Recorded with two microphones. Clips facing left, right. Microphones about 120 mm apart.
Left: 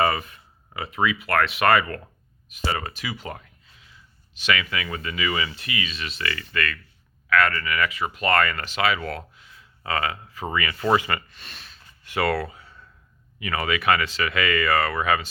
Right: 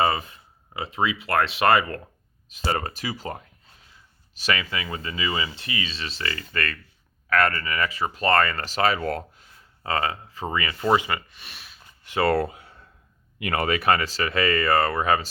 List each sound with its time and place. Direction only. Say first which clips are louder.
0.0 s speech: even; 25° right (ahead or behind)
2.5 s speech: right 1 dB; 35° right (ahead or behind)
4.4 s speech: left 1 dB; 35° right (ahead or behind); by 12.1 s 10° right (ahead or behind)
12.5 s a sound: right 2 dB; 55° right (ahead or behind)
13.4 s speech: right 1 dB; 50° right (ahead or behind); by 15.3 s 35° right (ahead or behind)